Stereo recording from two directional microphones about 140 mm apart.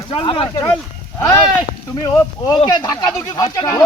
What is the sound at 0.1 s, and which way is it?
Speech, 35° left (ahead or behind).